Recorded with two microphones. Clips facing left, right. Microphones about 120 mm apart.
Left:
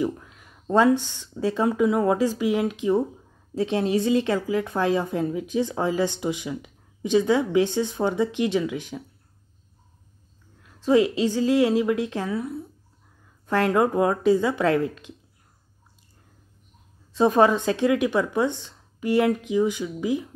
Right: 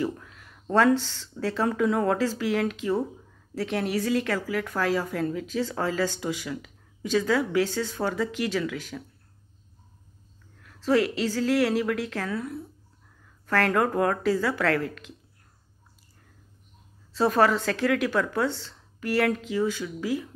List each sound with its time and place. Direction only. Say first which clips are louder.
0.2 s a woman's voice: even; 15° left (ahead or behind)
10.6 s a woman's voice: left 4 dB; 15° left (ahead or behind)
17.1 s speech: left 3 dB; 20° left (ahead or behind)